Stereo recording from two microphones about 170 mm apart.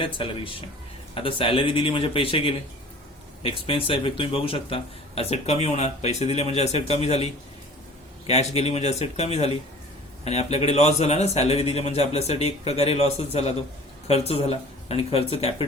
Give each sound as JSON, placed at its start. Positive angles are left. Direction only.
{"t": 0.0, "sound": "speech", "side_deg": 30}
{"t": 8.3, "sound": "speech", "side_deg": 40}